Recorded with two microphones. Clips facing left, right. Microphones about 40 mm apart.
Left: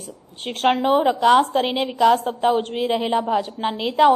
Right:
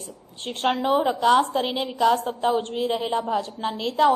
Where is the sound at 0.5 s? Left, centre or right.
Left.